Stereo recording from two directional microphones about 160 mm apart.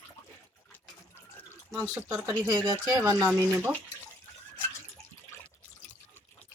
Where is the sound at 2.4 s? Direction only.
25° right (ahead or behind).